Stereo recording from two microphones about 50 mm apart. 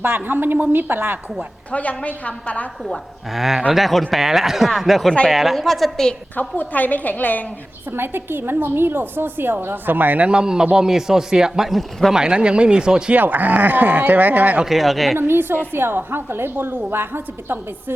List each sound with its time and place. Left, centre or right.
0.0 s a woman's voice: right
1.7 s a woman's voice: left
2.8 s speech: centre
6.6 s a woman's voice: left
7.9 s a woman's voice: right
10.2 s a man's voice: centre
12.1 s speech: centre
13.1 s speech: right
14.6 s speech: centre
15.2 s a woman's voice: right